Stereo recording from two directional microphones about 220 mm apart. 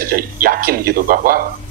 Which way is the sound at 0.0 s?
40° right (ahead or behind).